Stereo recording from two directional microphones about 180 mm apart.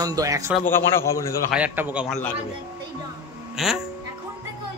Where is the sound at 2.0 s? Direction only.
5° left (ahead or behind).